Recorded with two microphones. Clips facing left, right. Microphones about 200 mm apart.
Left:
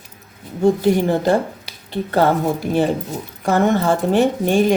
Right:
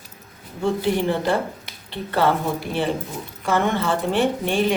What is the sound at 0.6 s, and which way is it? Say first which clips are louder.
Speech: left 6 dB; 45° left (ahead or behind).